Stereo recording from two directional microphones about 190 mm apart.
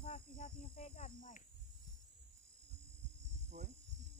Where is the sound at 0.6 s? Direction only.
30° left (ahead or behind).